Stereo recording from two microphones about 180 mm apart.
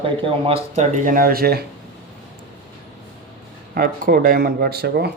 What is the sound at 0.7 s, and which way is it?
Speech, 45° right (ahead or behind).